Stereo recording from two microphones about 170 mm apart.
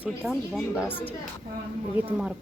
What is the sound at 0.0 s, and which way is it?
Speech, 5° right (ahead or behind).